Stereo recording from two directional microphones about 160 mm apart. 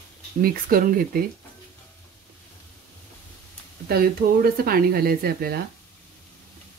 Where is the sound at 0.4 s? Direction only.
65° right (ahead or behind).